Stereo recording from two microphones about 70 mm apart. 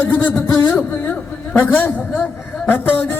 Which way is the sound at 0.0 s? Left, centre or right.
Left.